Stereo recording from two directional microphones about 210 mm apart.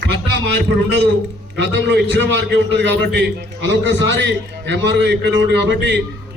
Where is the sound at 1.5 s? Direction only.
55° right (ahead or behind).